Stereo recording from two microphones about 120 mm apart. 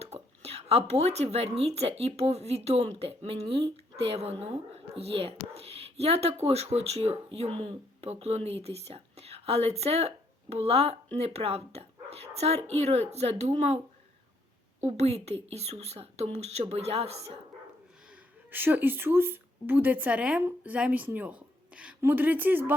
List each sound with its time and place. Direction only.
0.0 s speech: 60° right (ahead or behind)
14.8 s speech: 70° right (ahead or behind)
18.1 s a woman's voice: 15° right (ahead or behind)